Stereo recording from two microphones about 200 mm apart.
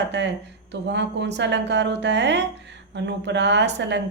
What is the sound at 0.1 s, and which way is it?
A woman's voice, 60° right (ahead or behind).